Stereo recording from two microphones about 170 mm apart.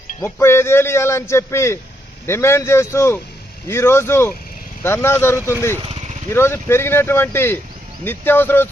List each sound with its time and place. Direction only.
0.2 s speech: 15° left (ahead or behind)